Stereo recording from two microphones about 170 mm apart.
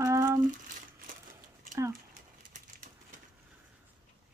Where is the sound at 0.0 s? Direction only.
15° right (ahead or behind).